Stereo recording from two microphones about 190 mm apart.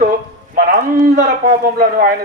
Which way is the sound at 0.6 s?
65° right (ahead or behind).